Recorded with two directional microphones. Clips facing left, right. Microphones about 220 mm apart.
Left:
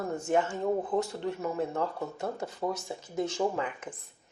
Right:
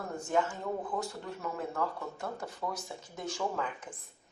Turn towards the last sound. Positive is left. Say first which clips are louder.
# left 6 dB
turn(degrees=25)  # may be behind; listen again after turning